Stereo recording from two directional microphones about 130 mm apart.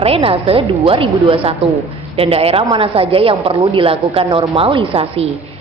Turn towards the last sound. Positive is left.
turn(degrees=-50)  # may be behind; listen again after turning